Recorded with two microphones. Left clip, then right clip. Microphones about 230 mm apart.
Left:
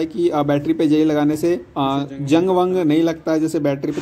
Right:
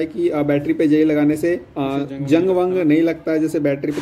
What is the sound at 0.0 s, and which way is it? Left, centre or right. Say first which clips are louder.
Speech: left 1 dB; left.